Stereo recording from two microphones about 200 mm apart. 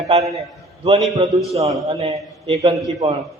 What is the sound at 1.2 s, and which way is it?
A man's voice, 30° right (ahead or behind).